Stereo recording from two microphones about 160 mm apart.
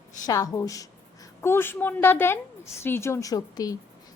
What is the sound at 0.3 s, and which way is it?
A woman's voice, 20° left (ahead or behind).